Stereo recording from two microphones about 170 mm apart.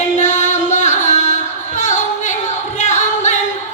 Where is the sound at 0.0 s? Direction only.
45° left (ahead or behind).